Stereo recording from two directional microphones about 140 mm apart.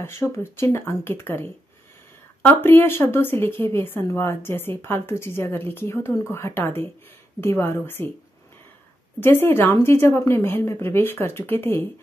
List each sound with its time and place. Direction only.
0.0 s a woman's voice: 20° left (ahead or behind)
9.2 s a woman's voice: 15° left (ahead or behind)